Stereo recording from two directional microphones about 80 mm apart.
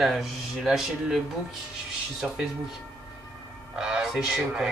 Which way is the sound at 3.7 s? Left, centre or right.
Centre.